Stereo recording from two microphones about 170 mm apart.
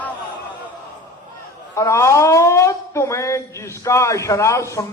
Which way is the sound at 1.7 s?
15° left (ahead or behind).